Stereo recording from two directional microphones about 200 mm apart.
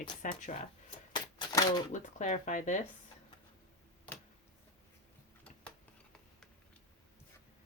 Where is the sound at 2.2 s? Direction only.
40° left (ahead or behind).